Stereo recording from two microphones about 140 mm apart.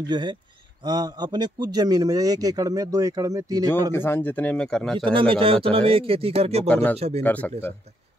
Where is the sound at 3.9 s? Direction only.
15° left (ahead or behind).